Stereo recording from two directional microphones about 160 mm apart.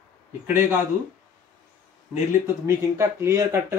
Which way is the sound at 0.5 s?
15° right (ahead or behind).